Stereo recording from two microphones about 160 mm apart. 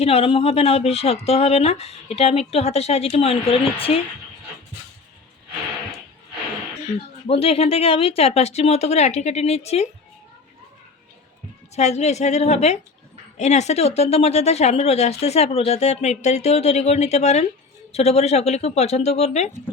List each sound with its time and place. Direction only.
0.0 s speech: 40° left (ahead or behind)
7.3 s speech: 35° left (ahead or behind)
11.7 s speech: 45° left (ahead or behind)